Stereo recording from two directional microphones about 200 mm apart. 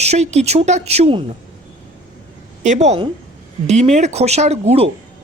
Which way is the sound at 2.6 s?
35° right (ahead or behind).